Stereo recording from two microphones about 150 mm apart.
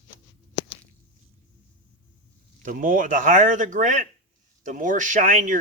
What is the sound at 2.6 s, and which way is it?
Speech, 65° right (ahead or behind).